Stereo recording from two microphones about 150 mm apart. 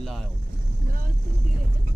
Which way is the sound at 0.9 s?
75° right (ahead or behind).